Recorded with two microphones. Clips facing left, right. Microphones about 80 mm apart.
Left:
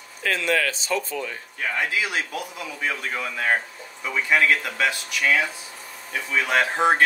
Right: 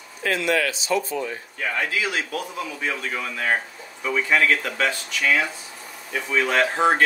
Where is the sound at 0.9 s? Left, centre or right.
Right.